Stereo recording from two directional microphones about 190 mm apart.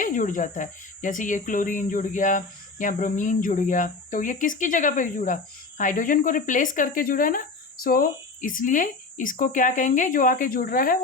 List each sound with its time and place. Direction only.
0.0 s speech: 45° left (ahead or behind)